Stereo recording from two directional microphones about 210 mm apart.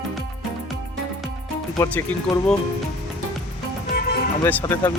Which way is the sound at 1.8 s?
10° left (ahead or behind).